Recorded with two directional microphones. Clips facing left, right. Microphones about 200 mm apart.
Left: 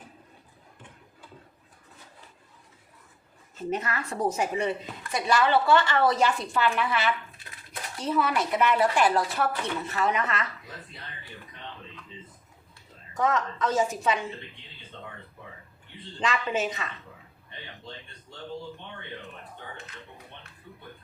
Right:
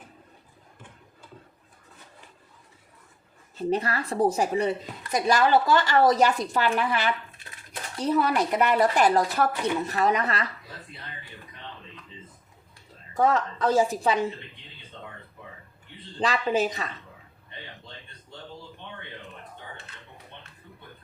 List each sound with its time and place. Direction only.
3.5 s speech: 35° right (ahead or behind)
13.1 s speech: 30° right (ahead or behind)
16.2 s speech: 35° right (ahead or behind)